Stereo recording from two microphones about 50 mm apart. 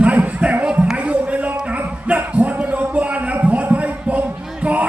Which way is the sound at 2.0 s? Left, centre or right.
Right.